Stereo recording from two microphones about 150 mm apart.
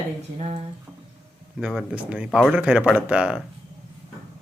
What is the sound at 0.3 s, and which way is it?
Speech, 45° right (ahead or behind).